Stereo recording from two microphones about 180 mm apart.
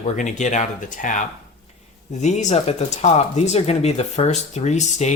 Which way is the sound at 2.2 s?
40° left (ahead or behind).